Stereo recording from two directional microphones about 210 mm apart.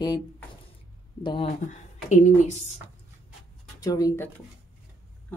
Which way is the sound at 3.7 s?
15° left (ahead or behind).